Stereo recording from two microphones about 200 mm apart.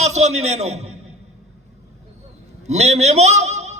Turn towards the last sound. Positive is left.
turn(degrees=-35)  # may be behind; listen again after turning